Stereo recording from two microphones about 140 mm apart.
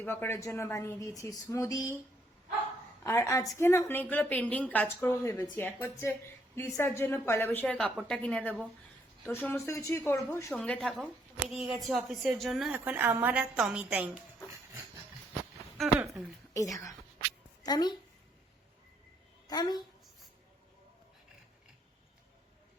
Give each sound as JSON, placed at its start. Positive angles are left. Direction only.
{"t": 0.0, "sound": "a woman's voice", "side_deg": 15}
{"t": 3.0, "sound": "a woman's voice", "side_deg": 20}
{"t": 10.6, "sound": "a woman's voice", "side_deg": 0}
{"t": 16.6, "sound": "a woman's voice", "side_deg": 25}
{"t": 19.5, "sound": "a woman's voice", "side_deg": 30}